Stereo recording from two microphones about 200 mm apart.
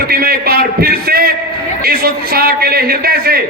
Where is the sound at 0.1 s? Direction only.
50° right (ahead or behind).